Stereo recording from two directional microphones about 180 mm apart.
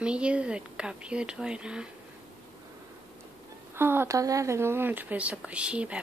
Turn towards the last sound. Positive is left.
turn(degrees=-5)  # may be behind; listen again after turning